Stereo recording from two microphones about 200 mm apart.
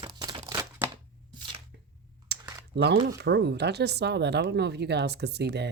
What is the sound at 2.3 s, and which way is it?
Typing, 55° right (ahead or behind).